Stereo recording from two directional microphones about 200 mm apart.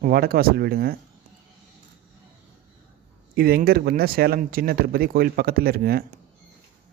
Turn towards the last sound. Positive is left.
turn(degrees=-50)  # may be behind; listen again after turning